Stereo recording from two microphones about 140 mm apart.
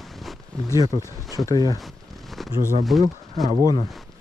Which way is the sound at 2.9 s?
Centre (ahead or behind).